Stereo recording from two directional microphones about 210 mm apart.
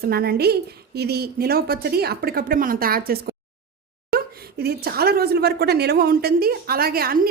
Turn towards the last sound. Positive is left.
turn(degrees=-45)  # may be behind; listen again after turning